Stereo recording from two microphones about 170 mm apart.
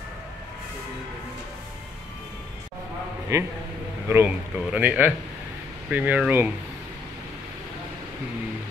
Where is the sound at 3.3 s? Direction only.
15° right (ahead or behind).